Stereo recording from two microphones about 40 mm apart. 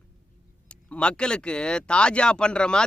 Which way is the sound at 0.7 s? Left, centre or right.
Left.